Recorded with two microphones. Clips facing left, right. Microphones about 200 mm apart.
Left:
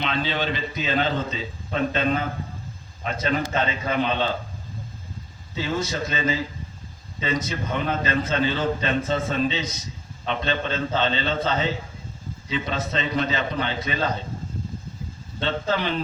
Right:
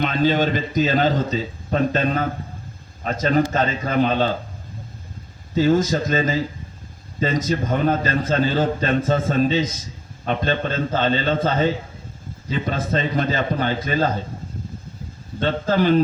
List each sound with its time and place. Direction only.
0.0 s a man's voice: 45° right (ahead or behind)
5.5 s a man's voice: 45° right (ahead or behind)
12.5 s a man's voice: 45° right (ahead or behind)
15.4 s a man's voice: 45° right (ahead or behind)